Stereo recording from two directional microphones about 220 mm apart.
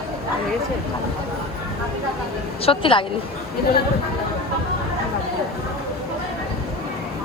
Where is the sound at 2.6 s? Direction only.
25° left (ahead or behind).